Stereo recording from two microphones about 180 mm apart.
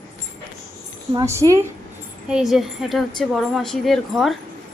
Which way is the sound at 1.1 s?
15° right (ahead or behind).